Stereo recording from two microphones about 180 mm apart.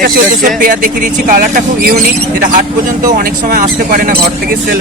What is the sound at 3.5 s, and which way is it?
Speech, 50° right (ahead or behind).